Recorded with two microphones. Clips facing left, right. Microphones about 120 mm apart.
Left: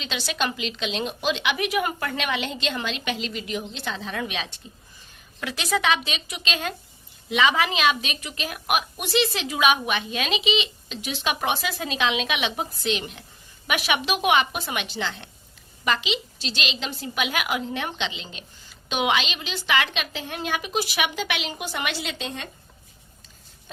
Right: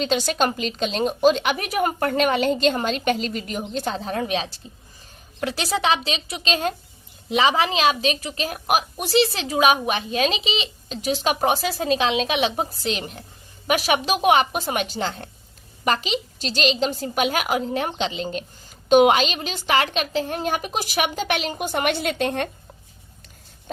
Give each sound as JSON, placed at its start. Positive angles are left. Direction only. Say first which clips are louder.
{"t": 0.0, "sound": "a woman's voice", "louder": "right 7 dB", "side_deg": -45}